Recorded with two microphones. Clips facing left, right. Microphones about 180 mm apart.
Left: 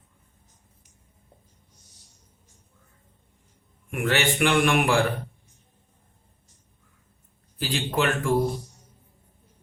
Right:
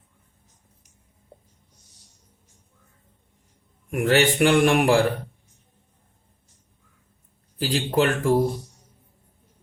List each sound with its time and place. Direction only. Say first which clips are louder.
3.9 s a man's voice: right 5 dB; 40° right (ahead or behind)
7.6 s a man's voice: right 4 dB; 40° right (ahead or behind)